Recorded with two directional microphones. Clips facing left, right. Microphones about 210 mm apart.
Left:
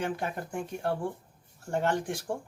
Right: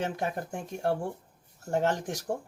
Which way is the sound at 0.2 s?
40° right (ahead or behind).